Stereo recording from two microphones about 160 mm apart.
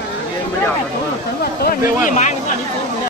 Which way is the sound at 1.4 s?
70° left (ahead or behind).